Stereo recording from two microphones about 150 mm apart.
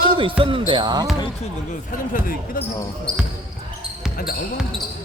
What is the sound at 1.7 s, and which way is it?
Speech, 65° left (ahead or behind).